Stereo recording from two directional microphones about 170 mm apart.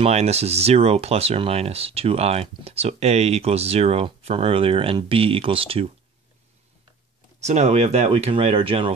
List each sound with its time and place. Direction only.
0.0 s speech: 40° right (ahead or behind)
7.3 s speech: 40° right (ahead or behind)